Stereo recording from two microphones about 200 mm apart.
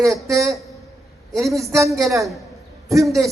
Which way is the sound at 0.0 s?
Centre (ahead or behind).